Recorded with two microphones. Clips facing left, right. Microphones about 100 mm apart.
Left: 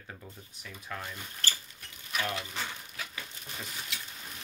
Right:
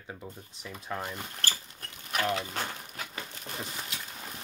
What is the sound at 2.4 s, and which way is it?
Crumpling, 45° right (ahead or behind).